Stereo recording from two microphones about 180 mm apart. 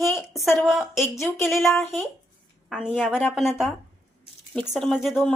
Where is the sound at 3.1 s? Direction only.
10° left (ahead or behind).